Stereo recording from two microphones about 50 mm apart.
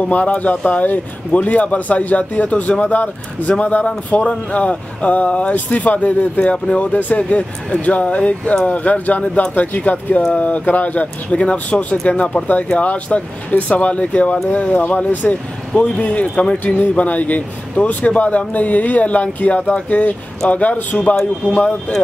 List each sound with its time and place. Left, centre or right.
0.0 s speech: left
9.2 s speech: centre
9.5 s speech: left